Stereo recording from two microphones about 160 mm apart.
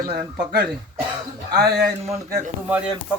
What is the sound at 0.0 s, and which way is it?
Speech, 60° right (ahead or behind).